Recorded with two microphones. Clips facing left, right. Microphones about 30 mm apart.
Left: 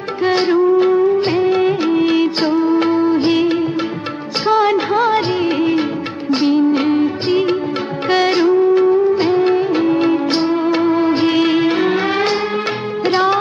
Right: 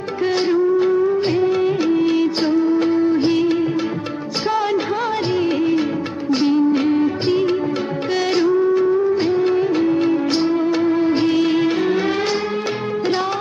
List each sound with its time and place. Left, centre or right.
0.2 s music of bollywood: left
6.3 s music: left